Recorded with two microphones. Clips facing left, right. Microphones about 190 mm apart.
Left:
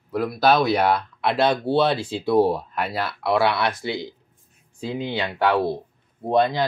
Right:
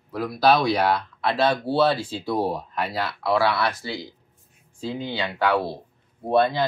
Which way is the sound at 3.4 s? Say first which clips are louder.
Left 2 dB; 20° left (ahead or behind).